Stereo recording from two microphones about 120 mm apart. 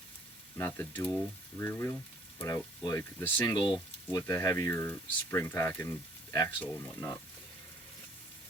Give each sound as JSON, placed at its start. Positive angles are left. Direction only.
{"t": 0.6, "sound": "frying", "side_deg": 15}
{"t": 2.4, "sound": "speech", "side_deg": 30}
{"t": 3.2, "sound": "frying", "side_deg": 15}
{"t": 4.1, "sound": "speech", "side_deg": 20}